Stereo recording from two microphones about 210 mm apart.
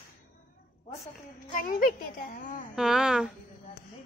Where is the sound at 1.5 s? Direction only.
40° left (ahead or behind).